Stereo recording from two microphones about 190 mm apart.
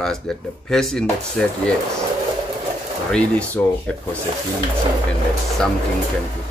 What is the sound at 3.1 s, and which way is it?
Speech, 5° left (ahead or behind).